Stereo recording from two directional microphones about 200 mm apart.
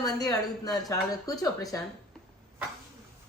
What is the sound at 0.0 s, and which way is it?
Speech, 20° left (ahead or behind).